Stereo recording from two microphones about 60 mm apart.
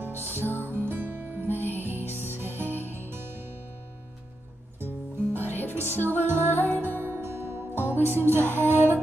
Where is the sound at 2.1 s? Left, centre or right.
Left.